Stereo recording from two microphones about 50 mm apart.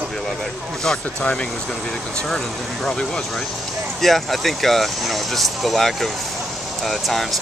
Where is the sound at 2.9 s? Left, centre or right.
Centre.